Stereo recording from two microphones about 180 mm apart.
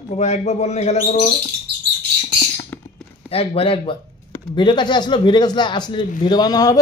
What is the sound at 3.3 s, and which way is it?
A man's voice, 30° left (ahead or behind).